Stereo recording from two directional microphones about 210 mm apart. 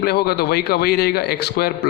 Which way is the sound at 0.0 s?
50° left (ahead or behind).